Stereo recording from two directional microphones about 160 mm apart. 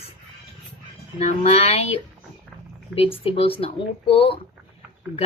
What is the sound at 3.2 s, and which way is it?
Speech, 35° left (ahead or behind).